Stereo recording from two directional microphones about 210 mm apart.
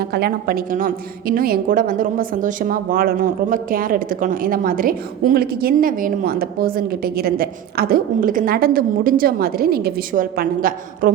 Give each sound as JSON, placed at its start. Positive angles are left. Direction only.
{"t": 0.0, "sound": "a woman's voice", "side_deg": -50}